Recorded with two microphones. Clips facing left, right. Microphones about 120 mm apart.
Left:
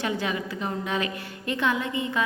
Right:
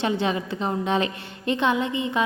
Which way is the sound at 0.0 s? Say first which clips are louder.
Right 4 dB; 25° right (ahead or behind).